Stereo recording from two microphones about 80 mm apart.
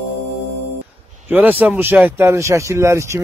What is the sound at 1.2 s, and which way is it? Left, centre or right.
Speech, right.